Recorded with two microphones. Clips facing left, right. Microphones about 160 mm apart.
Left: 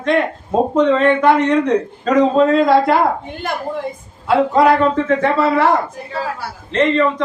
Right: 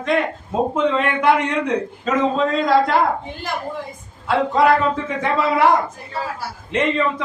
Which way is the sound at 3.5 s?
55° left (ahead or behind).